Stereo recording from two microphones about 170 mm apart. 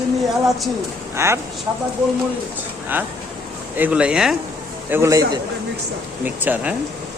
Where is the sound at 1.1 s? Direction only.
15° right (ahead or behind).